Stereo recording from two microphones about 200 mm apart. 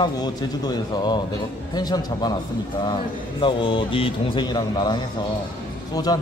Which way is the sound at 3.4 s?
25° left (ahead or behind).